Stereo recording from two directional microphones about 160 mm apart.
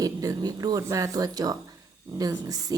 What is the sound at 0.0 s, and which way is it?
Speech, 25° right (ahead or behind).